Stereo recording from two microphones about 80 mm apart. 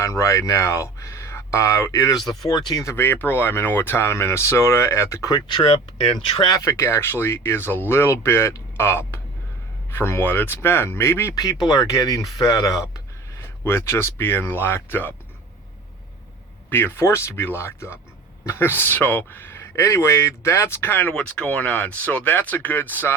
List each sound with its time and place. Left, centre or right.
0.0 s speech: left
2.5 s speech: left
2.8 s speech: left
5.3 s speech: left
6.7 s speech: left
11.6 s speech: left
13.7 s speech: left
16.6 s speech: left
21.1 s speech: centre